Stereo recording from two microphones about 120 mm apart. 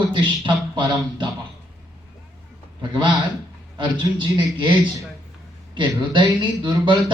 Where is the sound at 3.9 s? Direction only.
40° right (ahead or behind).